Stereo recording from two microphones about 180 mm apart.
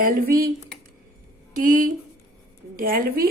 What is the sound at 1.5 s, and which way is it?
A woman's voice, 50° right (ahead or behind).